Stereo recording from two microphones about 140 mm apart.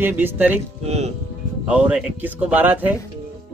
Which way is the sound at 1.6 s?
10° right (ahead or behind).